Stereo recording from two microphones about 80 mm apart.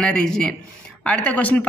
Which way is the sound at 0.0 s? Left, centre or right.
Centre.